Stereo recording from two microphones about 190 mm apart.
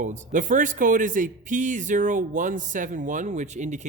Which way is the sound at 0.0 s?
40° right (ahead or behind).